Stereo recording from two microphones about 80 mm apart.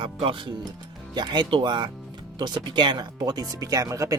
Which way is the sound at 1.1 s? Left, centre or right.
Right.